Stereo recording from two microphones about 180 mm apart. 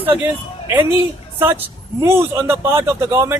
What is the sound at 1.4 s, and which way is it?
Speech, 10° right (ahead or behind).